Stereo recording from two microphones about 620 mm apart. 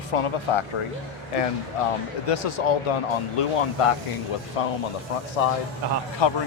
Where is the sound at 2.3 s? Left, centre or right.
Left.